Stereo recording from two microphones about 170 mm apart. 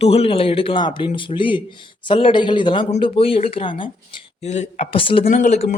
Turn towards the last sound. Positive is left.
turn(degrees=45)  # may be behind; listen again after turning